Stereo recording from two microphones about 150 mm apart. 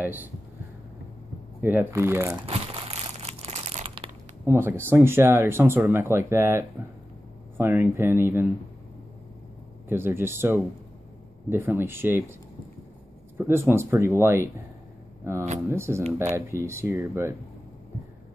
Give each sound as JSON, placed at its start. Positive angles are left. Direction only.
{"t": 0.0, "sound": "speech", "side_deg": -10}
{"t": 1.6, "sound": "speech", "side_deg": -15}
{"t": 2.4, "sound": "crumpling", "side_deg": -40}
{"t": 4.5, "sound": "speech", "side_deg": -15}
{"t": 9.8, "sound": "speech", "side_deg": -15}
{"t": 13.4, "sound": "speech", "side_deg": -15}